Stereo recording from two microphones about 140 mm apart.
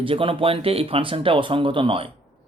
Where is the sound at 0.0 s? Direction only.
40° right (ahead or behind).